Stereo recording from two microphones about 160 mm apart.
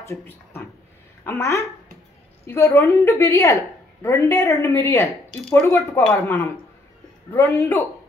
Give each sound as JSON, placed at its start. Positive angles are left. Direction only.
{"t": 0.0, "sound": "a woman's voice", "side_deg": 15}